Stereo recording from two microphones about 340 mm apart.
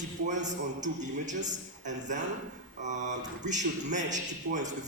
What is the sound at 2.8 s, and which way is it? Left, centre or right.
A man's voice, right.